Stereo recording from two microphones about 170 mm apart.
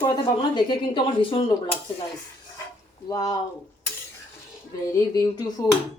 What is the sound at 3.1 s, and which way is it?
Speech, 20° left (ahead or behind).